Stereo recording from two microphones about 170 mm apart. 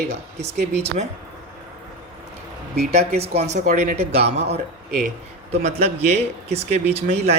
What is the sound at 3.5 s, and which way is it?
Speech, 40° right (ahead or behind).